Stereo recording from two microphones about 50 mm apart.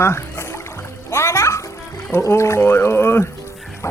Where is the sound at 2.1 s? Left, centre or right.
Left.